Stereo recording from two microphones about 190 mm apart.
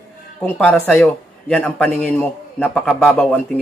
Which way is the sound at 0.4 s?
5° left (ahead or behind).